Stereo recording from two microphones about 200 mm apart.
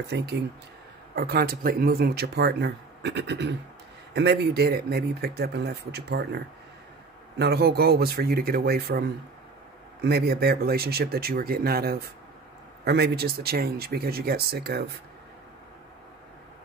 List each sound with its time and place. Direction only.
0.0 s speech: 55° right (ahead or behind)